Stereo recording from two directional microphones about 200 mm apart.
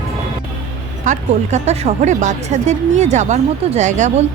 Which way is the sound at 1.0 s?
35° right (ahead or behind).